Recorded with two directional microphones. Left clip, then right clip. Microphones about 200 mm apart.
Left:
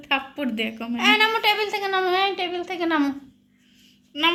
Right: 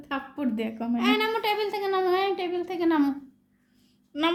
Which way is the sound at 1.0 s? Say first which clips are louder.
Left 7 dB; 5° left (ahead or behind).